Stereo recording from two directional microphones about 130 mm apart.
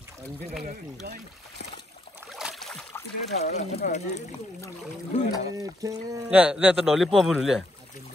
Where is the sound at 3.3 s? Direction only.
60° left (ahead or behind).